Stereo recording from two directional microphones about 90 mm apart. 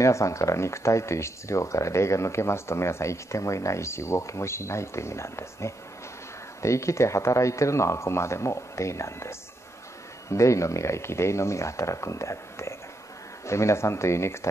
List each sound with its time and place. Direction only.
0.0 s speech: 35° left (ahead or behind)
10.3 s speech: 35° left (ahead or behind)